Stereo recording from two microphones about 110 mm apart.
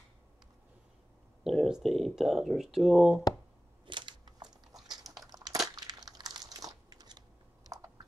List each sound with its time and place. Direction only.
1.4 s speech: centre (ahead or behind)
3.8 s a sound: 45° right (ahead or behind)
5.2 s crumpling: 35° right (ahead or behind)